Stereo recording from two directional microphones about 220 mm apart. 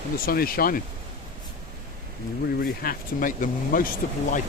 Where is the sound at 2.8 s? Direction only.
40° left (ahead or behind).